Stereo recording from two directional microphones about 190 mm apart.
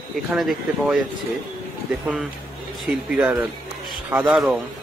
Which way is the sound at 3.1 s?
5° right (ahead or behind).